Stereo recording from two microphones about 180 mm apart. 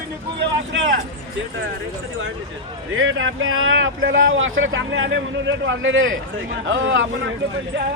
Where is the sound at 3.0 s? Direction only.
90° right.